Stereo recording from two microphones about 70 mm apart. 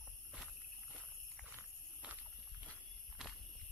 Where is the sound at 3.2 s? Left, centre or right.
Centre.